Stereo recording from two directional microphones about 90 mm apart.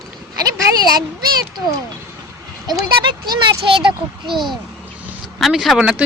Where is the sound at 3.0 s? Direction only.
65° right (ahead or behind).